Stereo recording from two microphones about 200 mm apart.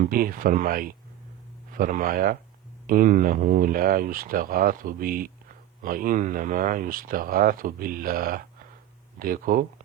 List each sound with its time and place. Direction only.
0.0 s speech: 45° right (ahead or behind)